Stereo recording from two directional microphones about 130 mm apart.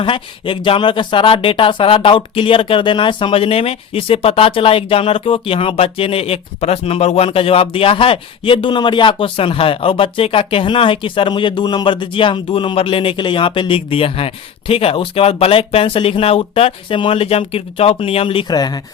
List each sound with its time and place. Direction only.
0.0 s speech: 40° left (ahead or behind)